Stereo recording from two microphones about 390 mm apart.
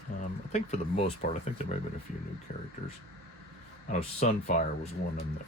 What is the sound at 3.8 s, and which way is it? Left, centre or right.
Speech, left.